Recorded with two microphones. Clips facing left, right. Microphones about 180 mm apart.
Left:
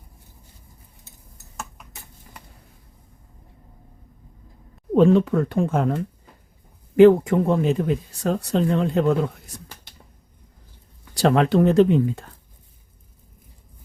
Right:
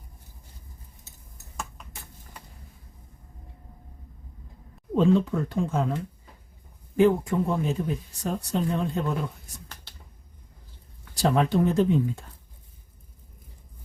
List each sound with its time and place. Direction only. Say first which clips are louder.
4.9 s speech: left 5 dB; 65° left (ahead or behind)
6.9 s speech: left 8 dB; 70° left (ahead or behind)
11.1 s speech: left 5 dB; 75° left (ahead or behind)